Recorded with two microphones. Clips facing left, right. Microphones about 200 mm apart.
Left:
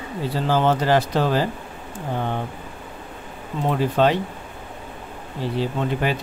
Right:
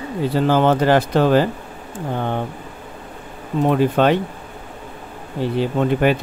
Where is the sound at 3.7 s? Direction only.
60° right (ahead or behind).